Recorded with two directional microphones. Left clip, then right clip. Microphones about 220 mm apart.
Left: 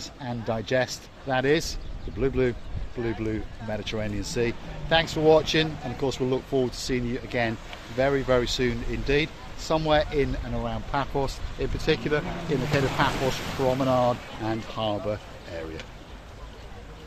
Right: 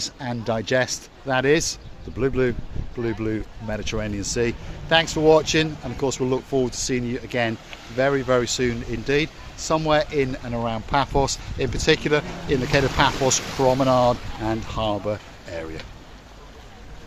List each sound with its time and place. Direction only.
0.0 s speech: 40° right (ahead or behind)